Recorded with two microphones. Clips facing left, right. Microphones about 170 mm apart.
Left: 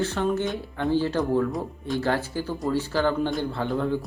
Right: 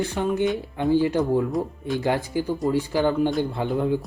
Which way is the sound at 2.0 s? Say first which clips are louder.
Right 3 dB; 15° right (ahead or behind).